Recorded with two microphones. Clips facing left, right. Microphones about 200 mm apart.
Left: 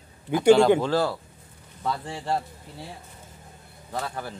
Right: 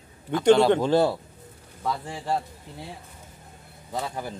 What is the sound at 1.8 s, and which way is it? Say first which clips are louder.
Speech: even; 5° right (ahead or behind).